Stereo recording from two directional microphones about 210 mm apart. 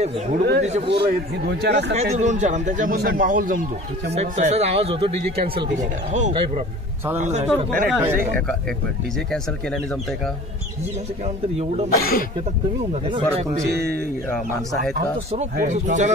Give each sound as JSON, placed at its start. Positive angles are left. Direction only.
{"t": 0.6, "sound": "speech", "side_deg": -30}
{"t": 1.4, "sound": "speech", "side_deg": -50}
{"t": 2.0, "sound": "speech", "side_deg": -35}
{"t": 6.1, "sound": "speech", "side_deg": -35}
{"t": 7.4, "sound": "speech", "side_deg": -5}
{"t": 11.5, "sound": "speech", "side_deg": -30}
{"t": 12.0, "sound": "speech", "side_deg": 45}
{"t": 13.1, "sound": "speech", "side_deg": -30}
{"t": 15.5, "sound": "speech", "side_deg": -35}